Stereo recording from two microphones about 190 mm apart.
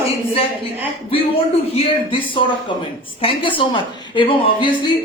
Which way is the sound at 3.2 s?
25° left (ahead or behind).